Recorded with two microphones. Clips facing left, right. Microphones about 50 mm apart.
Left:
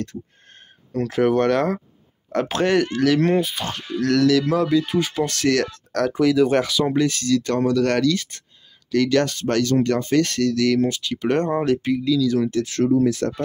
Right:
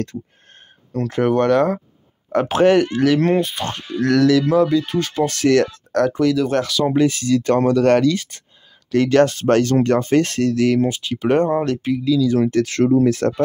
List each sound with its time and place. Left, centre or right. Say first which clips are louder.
0.9 s speech: right 1 dB; centre
2.3 s speech: right 5 dB; centre
4.0 s speech: right 3 dB; right
4.3 s speech: right 3 dB; centre
5.2 s speech: right 7 dB; centre
5.9 s a sound: right 4 dB; centre
6.1 s speech: even; centre
6.9 s speech: right 3 dB; centre
11.4 s speech: right 1 dB; centre
12.4 s speech: right 4 dB; right